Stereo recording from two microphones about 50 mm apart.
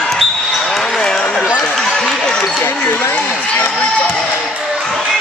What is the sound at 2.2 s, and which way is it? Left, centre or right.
Basketball bounce, centre.